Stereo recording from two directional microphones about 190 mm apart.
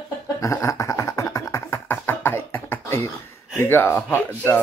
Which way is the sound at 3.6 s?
10° left (ahead or behind).